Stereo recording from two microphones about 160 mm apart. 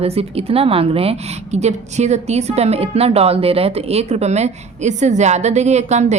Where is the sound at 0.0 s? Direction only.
40° right (ahead or behind).